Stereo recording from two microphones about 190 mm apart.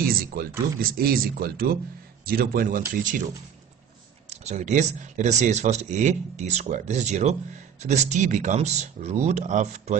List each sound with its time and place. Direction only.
0.0 s speech: 50° right (ahead or behind)
4.3 s speech: 35° right (ahead or behind)